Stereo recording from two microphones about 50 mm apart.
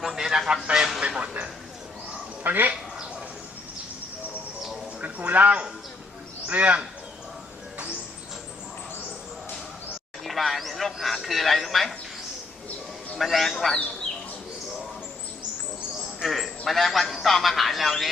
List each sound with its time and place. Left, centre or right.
0.0 s speech: centre
1.0 s a sound: right
2.4 s speech: right
4.9 s a sound: right
6.5 s speech: right
10.2 s a man's voice: centre
13.1 s a man's voice: centre
16.2 s a man's voice: centre